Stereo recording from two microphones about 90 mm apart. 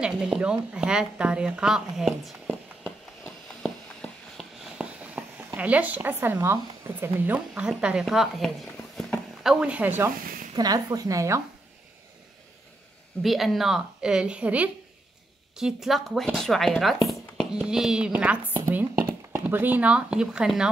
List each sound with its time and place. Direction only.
0.0 s a woman's voice: 10° right (ahead or behind)
3.3 s a sound: centre (ahead or behind)
4.7 s a sound: 15° right (ahead or behind)
5.6 s a woman's voice: 15° right (ahead or behind)
10.5 s a woman's voice: 45° right (ahead or behind)
13.2 s a woman's voice: centre (ahead or behind)